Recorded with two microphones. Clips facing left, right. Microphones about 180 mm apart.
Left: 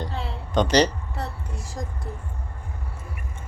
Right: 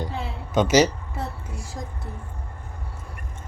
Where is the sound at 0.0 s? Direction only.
5° right (ahead or behind).